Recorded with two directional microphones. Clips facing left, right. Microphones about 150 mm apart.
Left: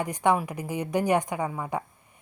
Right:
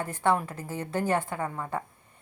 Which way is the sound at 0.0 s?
15° left (ahead or behind).